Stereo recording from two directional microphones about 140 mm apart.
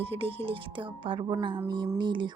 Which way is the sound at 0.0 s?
40° right (ahead or behind).